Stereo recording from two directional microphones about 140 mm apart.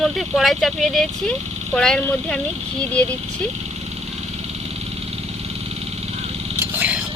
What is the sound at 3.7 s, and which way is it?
Vehicle, 50° right (ahead or behind).